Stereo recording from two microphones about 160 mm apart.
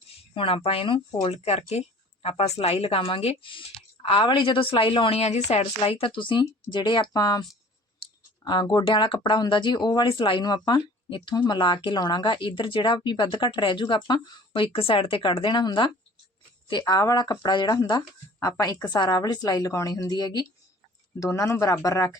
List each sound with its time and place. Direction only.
0.3 s speech: 35° left (ahead or behind)
1.3 s speech: 40° left (ahead or behind)
8.4 s speech: 25° left (ahead or behind)